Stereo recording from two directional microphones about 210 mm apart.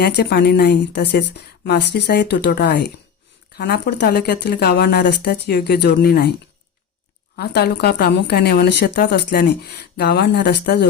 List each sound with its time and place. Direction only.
0.0 s a woman's voice: 50° left (ahead or behind)
7.3 s a woman's voice: 50° left (ahead or behind)